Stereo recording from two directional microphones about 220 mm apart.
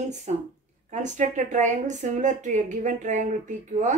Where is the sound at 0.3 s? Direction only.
30° right (ahead or behind).